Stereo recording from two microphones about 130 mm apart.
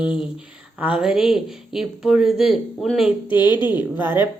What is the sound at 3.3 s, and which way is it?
Speech, 35° left (ahead or behind).